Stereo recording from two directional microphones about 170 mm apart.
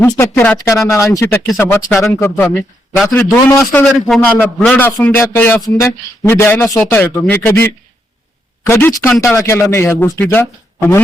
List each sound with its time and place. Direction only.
0.0 s a man's voice: 15° left (ahead or behind)
0.9 s a man's voice: 20° left (ahead or behind)
1.9 s speech: centre (ahead or behind)
2.1 s a man's voice: 15° left (ahead or behind)
8.6 s a man's voice: 15° left (ahead or behind)
9.4 s a man's voice: 15° left (ahead or behind)